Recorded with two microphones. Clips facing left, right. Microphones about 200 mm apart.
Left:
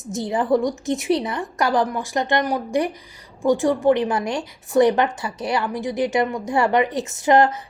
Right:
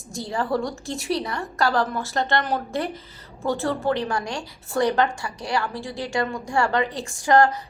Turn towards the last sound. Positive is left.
turn(degrees=20)  # may be behind; listen again after turning